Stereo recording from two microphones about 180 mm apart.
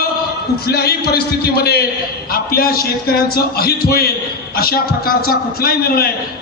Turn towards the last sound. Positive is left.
turn(degrees=55)  # may be behind; listen again after turning